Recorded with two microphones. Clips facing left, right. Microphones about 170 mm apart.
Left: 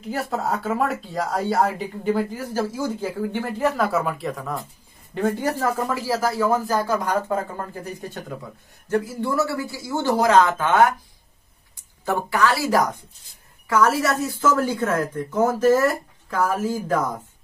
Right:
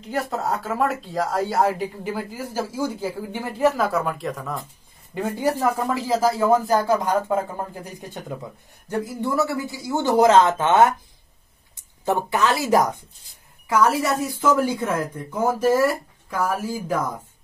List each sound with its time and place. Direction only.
0.1 s a woman's voice: centre (ahead or behind)
3.8 s speech: centre (ahead or behind)
5.1 s a woman's voice: 10° right (ahead or behind)
8.8 s a man's voice: 15° right (ahead or behind)
12.0 s a man's voice: 20° right (ahead or behind)